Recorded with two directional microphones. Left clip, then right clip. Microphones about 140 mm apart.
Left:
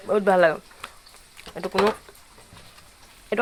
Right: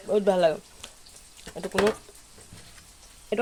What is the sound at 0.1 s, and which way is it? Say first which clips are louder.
Speech: left 3 dB; centre (ahead or behind).